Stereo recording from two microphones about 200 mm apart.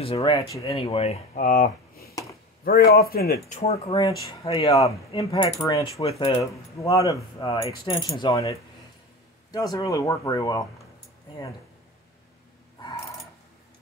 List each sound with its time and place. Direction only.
0.0 s speech: 25° left (ahead or behind)
0.7 s speech: 30° left (ahead or behind)
4.6 s speech: 15° left (ahead or behind)
5.9 s speech: 30° left (ahead or behind)
6.4 s speech: 15° left (ahead or behind)